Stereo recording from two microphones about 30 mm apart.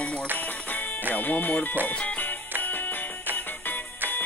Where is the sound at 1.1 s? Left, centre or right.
Left.